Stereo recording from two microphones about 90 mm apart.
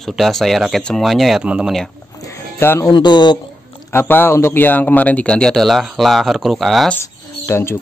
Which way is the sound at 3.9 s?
25° left (ahead or behind).